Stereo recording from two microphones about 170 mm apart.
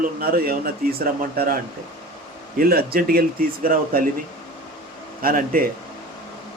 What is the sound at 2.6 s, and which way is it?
Speech, 60° right (ahead or behind).